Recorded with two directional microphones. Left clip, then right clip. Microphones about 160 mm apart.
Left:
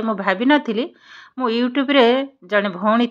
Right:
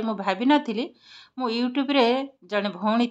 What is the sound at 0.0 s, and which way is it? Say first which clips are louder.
A woman's voice: left 6 dB; 15° left (ahead or behind).